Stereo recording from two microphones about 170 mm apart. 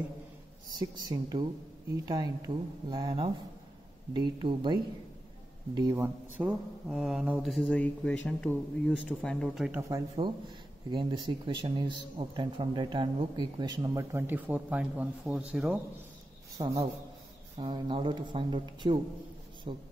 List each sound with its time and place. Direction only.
0.7 s speech: 25° right (ahead or behind)
5.8 s speech: 15° right (ahead or behind)
6.9 s speech: centre (ahead or behind)
9.7 s speech: 20° right (ahead or behind)
16.5 s a man's voice: 20° right (ahead or behind)